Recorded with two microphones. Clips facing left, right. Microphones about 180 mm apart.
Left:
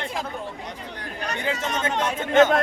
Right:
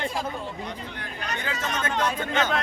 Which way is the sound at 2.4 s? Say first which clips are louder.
Left 10 dB; 50° left (ahead or behind).